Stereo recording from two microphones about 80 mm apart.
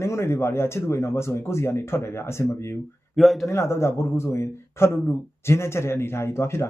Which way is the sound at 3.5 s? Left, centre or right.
Left.